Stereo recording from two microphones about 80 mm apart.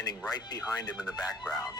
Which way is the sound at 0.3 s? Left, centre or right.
Left.